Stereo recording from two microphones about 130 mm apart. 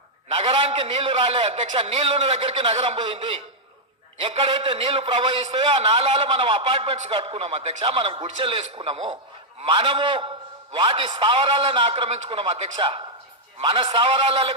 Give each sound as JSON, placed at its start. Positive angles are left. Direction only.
{"t": 0.3, "sound": "a man's voice", "side_deg": -45}